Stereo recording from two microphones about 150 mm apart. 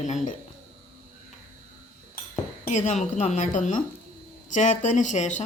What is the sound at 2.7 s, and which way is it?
A woman's voice, 50° left (ahead or behind).